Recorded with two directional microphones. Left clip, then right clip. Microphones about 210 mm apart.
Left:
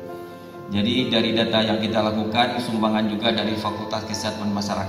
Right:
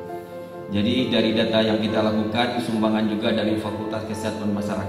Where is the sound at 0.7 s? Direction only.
35° left (ahead or behind).